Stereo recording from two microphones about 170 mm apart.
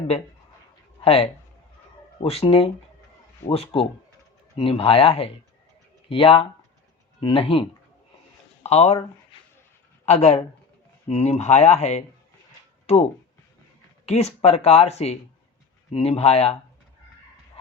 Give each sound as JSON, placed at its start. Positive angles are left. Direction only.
{"t": 1.0, "sound": "speech", "side_deg": 35}
{"t": 8.6, "sound": "speech", "side_deg": 40}
{"t": 10.1, "sound": "speech", "side_deg": 40}